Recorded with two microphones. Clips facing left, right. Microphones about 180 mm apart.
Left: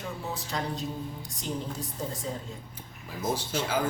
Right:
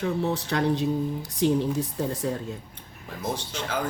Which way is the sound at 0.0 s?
70° right (ahead or behind).